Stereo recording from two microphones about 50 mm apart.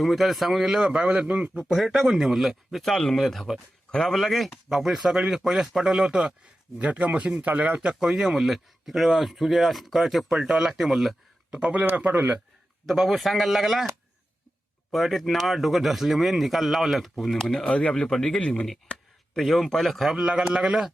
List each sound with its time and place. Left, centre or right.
0.0 s speech: centre; by 1.6 s right
2.0 s speech: centre
2.9 s speech: centre
6.9 s speech: right
7.9 s speech: centre
11.9 s a man's voice: right
12.8 s speech: centre
14.9 s speech: centre
17.3 s speech: centre
17.7 s speech: left
19.4 s speech: centre
20.1 s speech: centre